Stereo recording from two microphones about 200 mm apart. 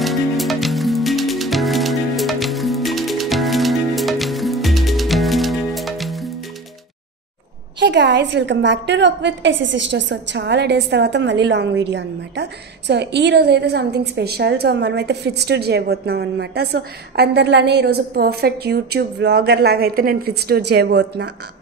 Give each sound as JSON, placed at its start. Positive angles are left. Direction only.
{"t": 0.0, "sound": "music", "side_deg": 0}
{"t": 7.8, "sound": "a woman's voice", "side_deg": -60}